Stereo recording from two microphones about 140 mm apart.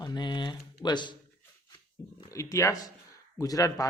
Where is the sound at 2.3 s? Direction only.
20° left (ahead or behind).